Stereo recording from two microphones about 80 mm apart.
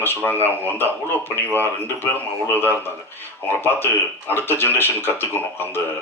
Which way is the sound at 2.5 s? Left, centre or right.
Left.